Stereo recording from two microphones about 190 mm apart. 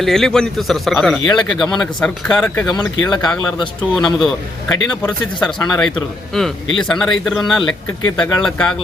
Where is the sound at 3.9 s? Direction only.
Centre (ahead or behind).